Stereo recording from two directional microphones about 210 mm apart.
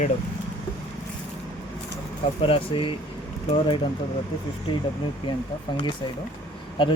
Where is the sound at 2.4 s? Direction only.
25° left (ahead or behind).